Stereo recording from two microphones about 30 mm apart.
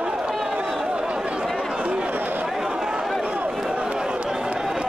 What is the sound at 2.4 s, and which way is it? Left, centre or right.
Chatter, centre.